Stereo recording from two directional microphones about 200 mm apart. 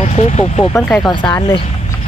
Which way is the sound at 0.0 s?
35° left (ahead or behind).